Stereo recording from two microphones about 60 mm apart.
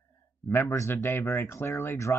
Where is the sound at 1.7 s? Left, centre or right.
Left.